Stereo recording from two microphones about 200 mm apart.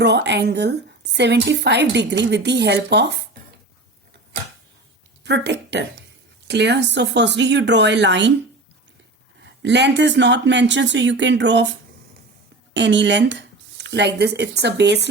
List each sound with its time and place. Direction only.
0.0 s speech: 60° right (ahead or behind)
5.2 s speech: 60° right (ahead or behind)
9.4 s speech: 60° right (ahead or behind)